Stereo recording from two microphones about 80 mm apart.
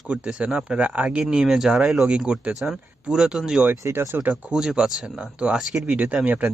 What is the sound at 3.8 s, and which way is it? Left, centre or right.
Speech, right.